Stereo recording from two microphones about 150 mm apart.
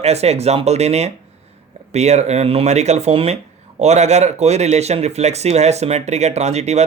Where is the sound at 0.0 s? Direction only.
45° right (ahead or behind).